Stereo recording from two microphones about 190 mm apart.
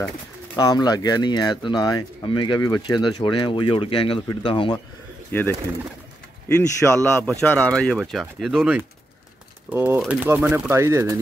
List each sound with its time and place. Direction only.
0.6 s speech: 20° left (ahead or behind)
5.3 s speech: 10° left (ahead or behind); by 11.1 s 15° right (ahead or behind)